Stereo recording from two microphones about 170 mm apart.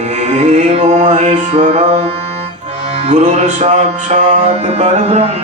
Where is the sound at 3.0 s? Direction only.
40° right (ahead or behind).